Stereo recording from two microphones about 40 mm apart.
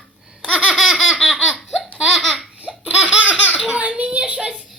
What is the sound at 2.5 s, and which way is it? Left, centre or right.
Laughter, right.